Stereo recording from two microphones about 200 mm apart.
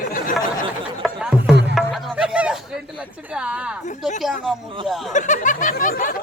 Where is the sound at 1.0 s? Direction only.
5° right (ahead or behind).